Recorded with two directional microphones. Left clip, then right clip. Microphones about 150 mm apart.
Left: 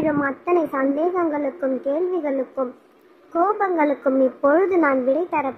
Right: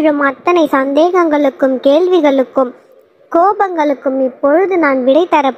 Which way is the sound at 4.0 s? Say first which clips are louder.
Right 5 dB; 15° right (ahead or behind).